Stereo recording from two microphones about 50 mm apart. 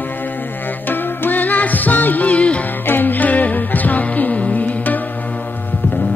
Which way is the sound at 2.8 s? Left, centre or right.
Left.